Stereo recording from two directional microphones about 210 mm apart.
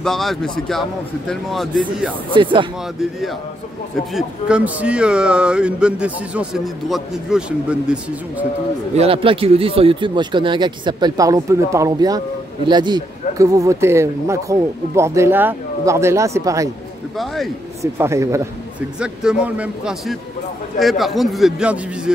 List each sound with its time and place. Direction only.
0.0 s speech: centre (ahead or behind)
2.3 s speech: 25° right (ahead or behind)
4.1 s speech: 5° right (ahead or behind)
8.9 s speech: 25° right (ahead or behind)
17.9 s speech: 15° right (ahead or behind)